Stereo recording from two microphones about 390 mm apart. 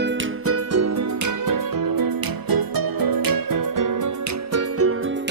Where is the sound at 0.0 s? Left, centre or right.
Right.